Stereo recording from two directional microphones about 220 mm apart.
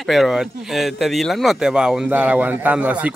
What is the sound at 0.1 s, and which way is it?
Speech, centre (ahead or behind).